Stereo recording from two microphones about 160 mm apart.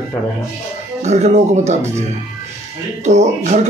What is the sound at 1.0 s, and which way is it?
Speech, 45° right (ahead or behind).